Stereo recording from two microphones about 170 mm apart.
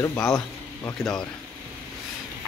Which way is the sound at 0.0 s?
15° left (ahead or behind).